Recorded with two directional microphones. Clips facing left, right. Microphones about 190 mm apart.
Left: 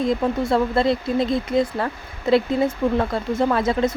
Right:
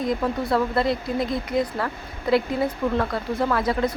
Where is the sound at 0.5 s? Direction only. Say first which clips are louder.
Left 2 dB; 25° left (ahead or behind).